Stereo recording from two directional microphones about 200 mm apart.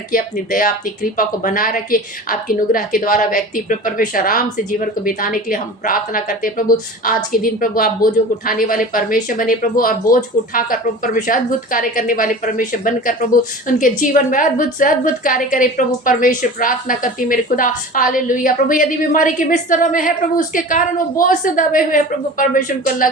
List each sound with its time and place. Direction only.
0.1 s a woman's voice: 45° left (ahead or behind)